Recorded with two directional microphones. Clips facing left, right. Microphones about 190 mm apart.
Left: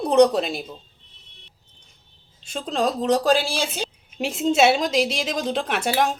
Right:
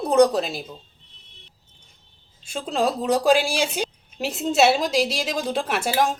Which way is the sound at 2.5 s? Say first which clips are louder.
Even; 5° right (ahead or behind).